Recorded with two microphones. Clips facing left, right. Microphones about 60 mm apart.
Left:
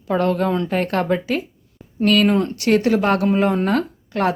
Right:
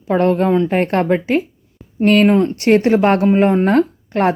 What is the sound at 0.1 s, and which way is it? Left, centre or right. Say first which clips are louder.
Speech: right 4 dB; right.